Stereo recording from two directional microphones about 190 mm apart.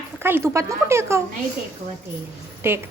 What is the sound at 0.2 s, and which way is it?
Speech, 10° right (ahead or behind).